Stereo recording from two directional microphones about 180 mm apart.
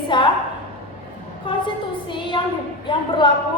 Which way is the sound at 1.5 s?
25° left (ahead or behind).